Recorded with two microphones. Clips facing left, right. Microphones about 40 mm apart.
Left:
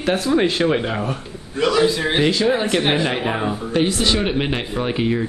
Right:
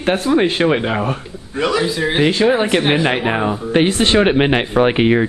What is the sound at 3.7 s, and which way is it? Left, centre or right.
Speech, right.